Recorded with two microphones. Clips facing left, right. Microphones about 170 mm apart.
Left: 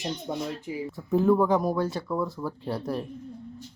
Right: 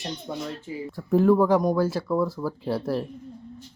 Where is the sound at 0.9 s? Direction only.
Centre (ahead or behind).